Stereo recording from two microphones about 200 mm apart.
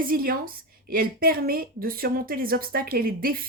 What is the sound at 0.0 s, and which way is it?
A woman's voice, 45° right (ahead or behind).